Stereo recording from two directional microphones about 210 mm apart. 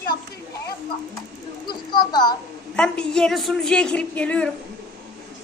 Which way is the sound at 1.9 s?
20° left (ahead or behind).